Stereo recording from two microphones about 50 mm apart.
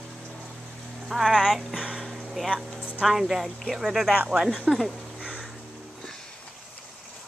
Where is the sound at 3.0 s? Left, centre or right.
Centre.